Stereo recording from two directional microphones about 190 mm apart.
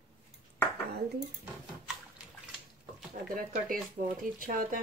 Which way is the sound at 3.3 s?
45° right (ahead or behind).